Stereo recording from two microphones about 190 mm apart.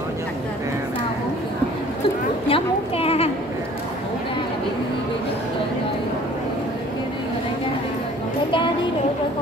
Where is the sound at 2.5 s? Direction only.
30° left (ahead or behind).